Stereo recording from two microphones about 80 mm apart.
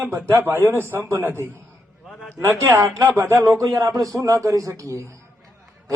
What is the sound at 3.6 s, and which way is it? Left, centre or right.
A man's voice, right.